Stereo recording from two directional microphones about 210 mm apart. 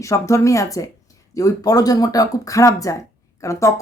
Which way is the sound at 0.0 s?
15° left (ahead or behind).